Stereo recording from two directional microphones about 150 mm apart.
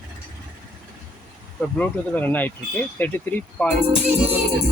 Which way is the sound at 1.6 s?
10° left (ahead or behind).